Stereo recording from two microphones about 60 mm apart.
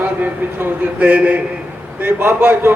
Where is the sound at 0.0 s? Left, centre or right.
Right.